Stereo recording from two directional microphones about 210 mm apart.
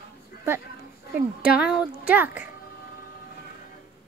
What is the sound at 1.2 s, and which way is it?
Speech, 5° right (ahead or behind).